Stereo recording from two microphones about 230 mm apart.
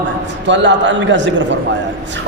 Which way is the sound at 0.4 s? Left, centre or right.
Right.